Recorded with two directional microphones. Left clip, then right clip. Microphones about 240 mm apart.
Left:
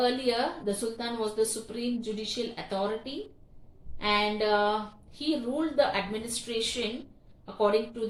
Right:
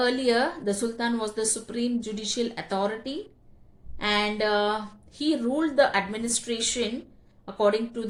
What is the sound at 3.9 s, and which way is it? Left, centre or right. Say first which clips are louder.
Speech: right 1 dB; right.